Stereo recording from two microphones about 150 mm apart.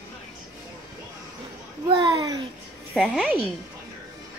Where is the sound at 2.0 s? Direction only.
25° right (ahead or behind).